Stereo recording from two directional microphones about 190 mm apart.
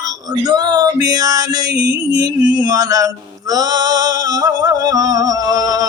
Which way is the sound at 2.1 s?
20° right (ahead or behind).